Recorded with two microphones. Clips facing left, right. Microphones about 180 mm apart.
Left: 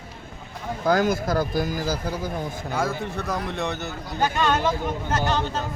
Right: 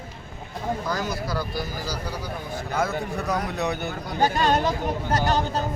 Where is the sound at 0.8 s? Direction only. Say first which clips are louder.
Left 7 dB; 55° left (ahead or behind).